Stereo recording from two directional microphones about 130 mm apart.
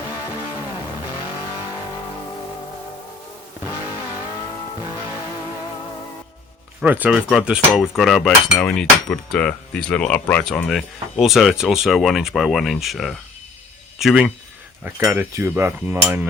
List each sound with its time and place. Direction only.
6.8 s speech: 10° right (ahead or behind)
7.3 s cutlery: 5° right (ahead or behind)
14.8 s cutlery: 15° right (ahead or behind)